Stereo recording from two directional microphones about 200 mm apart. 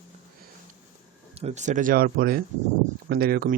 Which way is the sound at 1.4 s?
35° right (ahead or behind).